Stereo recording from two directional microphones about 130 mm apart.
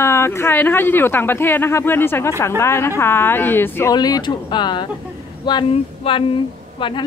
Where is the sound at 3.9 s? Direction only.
30° left (ahead or behind).